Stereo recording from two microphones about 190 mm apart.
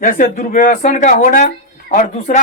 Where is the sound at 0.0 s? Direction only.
45° left (ahead or behind).